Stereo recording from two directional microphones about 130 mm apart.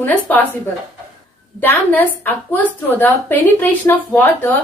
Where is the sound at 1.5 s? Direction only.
15° left (ahead or behind).